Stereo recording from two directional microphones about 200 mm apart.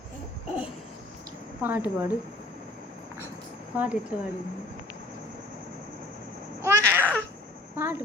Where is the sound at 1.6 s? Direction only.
10° right (ahead or behind).